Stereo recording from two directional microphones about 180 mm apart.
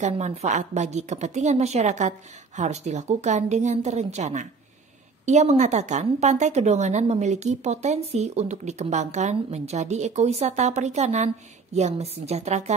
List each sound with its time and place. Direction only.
0.0 s a woman's voice: 40° right (ahead or behind)